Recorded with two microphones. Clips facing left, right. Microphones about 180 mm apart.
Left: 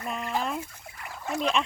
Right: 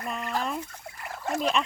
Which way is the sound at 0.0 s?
Centre (ahead or behind).